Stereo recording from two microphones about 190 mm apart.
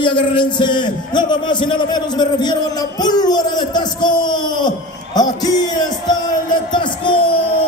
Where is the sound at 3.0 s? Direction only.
20° left (ahead or behind).